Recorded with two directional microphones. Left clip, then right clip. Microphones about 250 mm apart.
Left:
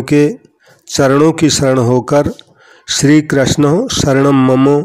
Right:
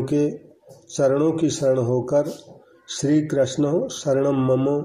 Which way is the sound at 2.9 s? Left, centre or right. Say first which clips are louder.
Left 11 dB; left.